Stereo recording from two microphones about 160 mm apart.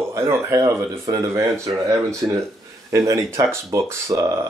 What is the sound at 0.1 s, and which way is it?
Speech, 15° right (ahead or behind).